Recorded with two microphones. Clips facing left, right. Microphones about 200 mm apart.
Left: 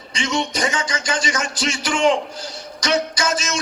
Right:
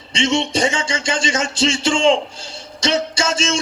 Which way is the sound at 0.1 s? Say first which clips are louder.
Right 5 dB; 25° right (ahead or behind).